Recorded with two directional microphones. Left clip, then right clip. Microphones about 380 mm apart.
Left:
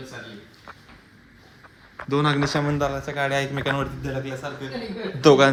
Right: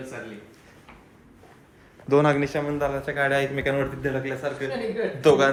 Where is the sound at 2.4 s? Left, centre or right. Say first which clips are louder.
Left 2 dB; left.